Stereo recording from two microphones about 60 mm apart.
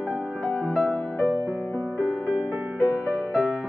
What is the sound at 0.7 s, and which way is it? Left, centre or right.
Music, left.